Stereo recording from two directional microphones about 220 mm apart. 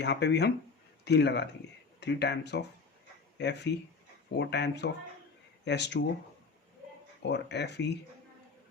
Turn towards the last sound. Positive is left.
turn(degrees=50)  # may be behind; listen again after turning